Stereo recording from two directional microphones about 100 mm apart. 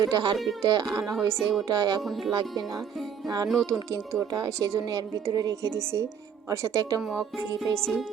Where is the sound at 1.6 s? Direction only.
40° right (ahead or behind).